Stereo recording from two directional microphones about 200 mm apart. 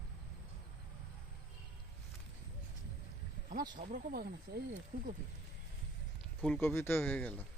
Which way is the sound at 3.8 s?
45° right (ahead or behind).